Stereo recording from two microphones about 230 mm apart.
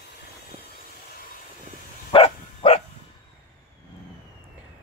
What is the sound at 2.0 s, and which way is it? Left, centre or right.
Bow-wow, left.